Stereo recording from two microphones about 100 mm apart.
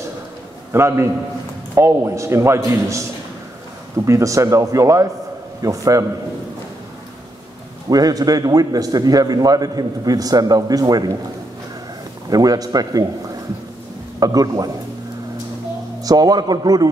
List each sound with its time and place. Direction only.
0.7 s a man's voice: 25° right (ahead or behind)
7.9 s a man's voice: 40° right (ahead or behind)
12.3 s a man's voice: 40° right (ahead or behind)
16.0 s a man's voice: 40° right (ahead or behind)